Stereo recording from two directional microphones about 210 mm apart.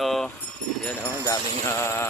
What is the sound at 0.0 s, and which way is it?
Keys jangling, centre (ahead or behind).